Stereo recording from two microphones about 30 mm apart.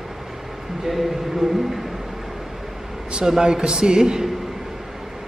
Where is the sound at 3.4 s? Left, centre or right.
Right.